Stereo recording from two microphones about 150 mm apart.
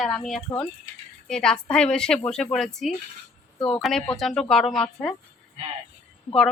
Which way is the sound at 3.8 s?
Centre (ahead or behind).